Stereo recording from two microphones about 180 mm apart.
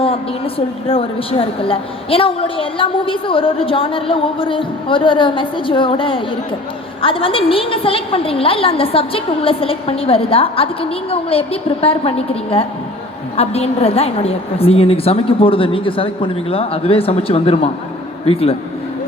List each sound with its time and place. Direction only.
0.9 s a woman's voice: 30° left (ahead or behind)